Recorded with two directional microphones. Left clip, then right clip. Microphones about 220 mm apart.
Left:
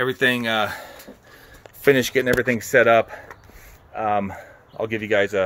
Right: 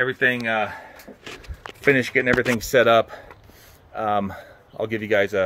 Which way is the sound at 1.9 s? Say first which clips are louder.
Left 1 dB; 20° left (ahead or behind).